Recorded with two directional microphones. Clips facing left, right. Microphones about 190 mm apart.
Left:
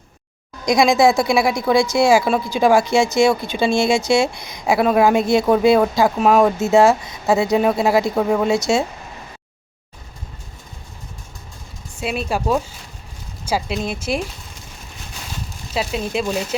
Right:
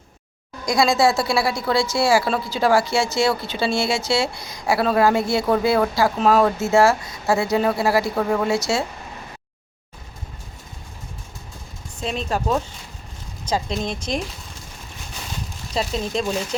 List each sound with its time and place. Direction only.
0.6 s a woman's voice: 20° left (ahead or behind)
11.9 s a woman's voice: 10° left (ahead or behind)
15.7 s a woman's voice: 5° left (ahead or behind)